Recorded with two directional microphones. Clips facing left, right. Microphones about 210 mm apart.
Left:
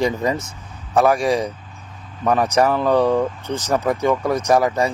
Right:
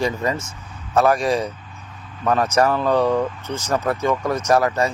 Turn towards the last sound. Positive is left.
turn(degrees=10)  # may be behind; listen again after turning